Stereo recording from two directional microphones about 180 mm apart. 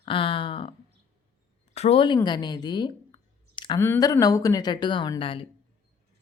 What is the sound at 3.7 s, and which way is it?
Speech, 15° left (ahead or behind).